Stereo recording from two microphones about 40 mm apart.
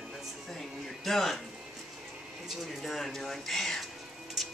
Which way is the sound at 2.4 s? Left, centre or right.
Centre.